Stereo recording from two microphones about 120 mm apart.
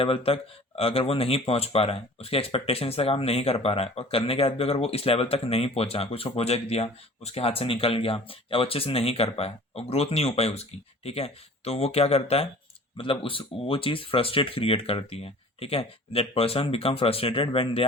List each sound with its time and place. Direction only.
0.0 s speech: 50° left (ahead or behind)
13.0 s speech: 45° left (ahead or behind)